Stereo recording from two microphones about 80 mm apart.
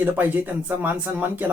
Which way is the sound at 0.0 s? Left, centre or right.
Right.